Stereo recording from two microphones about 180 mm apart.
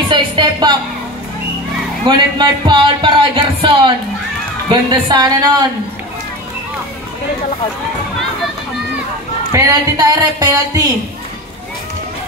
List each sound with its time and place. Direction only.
0.1 s music: 25° right (ahead or behind)
2.0 s speech: 25° right (ahead or behind)
9.5 s speech: 20° right (ahead or behind)